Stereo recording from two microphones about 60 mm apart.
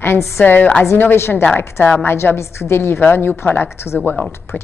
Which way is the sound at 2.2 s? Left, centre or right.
Left.